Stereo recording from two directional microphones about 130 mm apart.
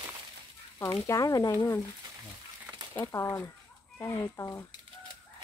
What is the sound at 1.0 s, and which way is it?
Speech, 25° left (ahead or behind).